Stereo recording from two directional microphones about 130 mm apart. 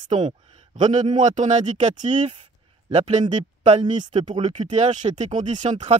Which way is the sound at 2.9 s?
60° right (ahead or behind).